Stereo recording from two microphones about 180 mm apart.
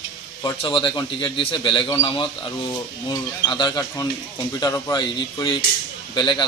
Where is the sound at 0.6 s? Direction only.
30° left (ahead or behind).